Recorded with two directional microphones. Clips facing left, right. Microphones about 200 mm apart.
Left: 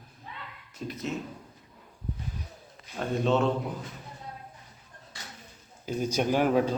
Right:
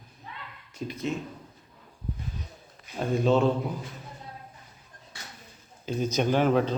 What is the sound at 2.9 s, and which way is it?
Speech, centre (ahead or behind).